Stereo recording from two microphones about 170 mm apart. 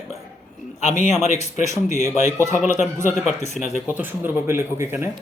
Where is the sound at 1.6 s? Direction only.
20° right (ahead or behind).